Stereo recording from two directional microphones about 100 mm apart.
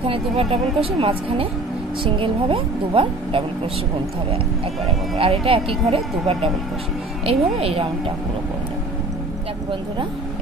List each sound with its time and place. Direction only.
0.0 s a woman's voice: 75° right (ahead or behind)
5.1 s a woman's voice: 75° right (ahead or behind)